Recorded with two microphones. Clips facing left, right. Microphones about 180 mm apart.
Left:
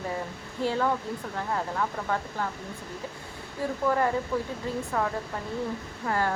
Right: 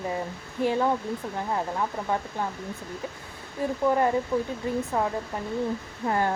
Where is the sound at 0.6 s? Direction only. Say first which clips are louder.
Right 2 dB; 15° right (ahead or behind).